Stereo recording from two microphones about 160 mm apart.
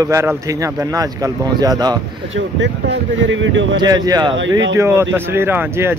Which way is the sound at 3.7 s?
25° right (ahead or behind).